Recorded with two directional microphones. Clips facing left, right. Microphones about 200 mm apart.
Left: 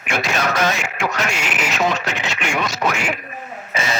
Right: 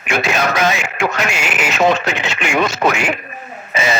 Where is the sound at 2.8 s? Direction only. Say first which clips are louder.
Right 4 dB; 45° right (ahead or behind).